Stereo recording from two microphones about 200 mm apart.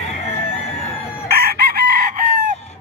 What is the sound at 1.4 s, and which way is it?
Chicken, 50° right (ahead or behind).